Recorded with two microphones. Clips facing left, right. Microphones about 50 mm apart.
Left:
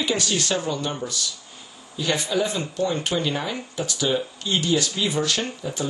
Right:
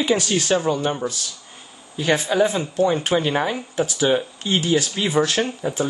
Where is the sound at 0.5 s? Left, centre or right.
Right.